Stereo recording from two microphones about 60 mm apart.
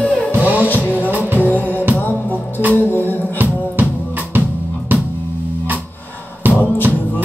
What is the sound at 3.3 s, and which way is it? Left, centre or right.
Drum, right.